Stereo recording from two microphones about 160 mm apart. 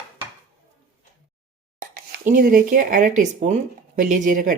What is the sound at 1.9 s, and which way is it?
Speech, 60° right (ahead or behind).